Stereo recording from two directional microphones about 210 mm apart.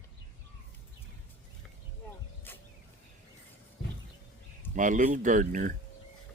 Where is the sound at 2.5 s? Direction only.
10° left (ahead or behind).